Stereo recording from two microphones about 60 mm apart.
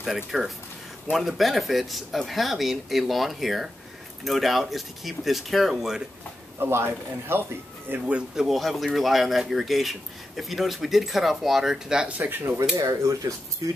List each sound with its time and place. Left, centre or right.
0.0 s speech: centre
6.6 s speech: right
8.4 s speech: centre
12.1 s speech: right
12.7 s speech: right
13.6 s speech: right